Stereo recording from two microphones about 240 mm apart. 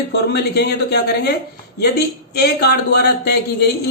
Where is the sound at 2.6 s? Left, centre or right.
Left.